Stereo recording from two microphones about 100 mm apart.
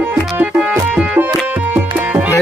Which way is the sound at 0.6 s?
10° right (ahead or behind).